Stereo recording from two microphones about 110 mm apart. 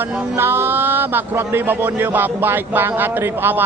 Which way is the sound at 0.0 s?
20° right (ahead or behind).